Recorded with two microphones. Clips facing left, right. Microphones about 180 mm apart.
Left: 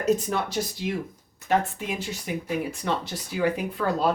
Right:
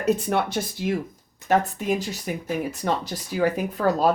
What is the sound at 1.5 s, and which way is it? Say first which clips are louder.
Speech: right 3 dB; 40° right (ahead or behind).